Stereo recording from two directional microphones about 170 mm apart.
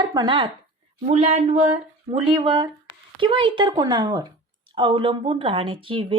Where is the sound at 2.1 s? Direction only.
30° right (ahead or behind).